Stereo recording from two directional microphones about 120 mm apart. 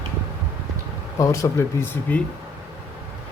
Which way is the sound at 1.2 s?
25° left (ahead or behind).